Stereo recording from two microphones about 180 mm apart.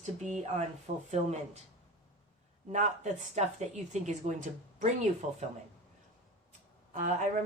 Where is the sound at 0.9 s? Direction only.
45° right (ahead or behind).